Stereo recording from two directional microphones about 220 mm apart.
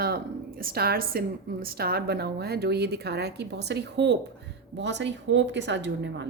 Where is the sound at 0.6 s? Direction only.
45° right (ahead or behind).